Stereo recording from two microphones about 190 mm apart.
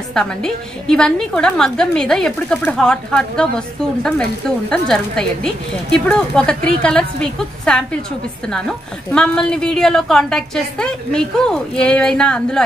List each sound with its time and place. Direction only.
0.1 s a woman's voice: 5° left (ahead or behind)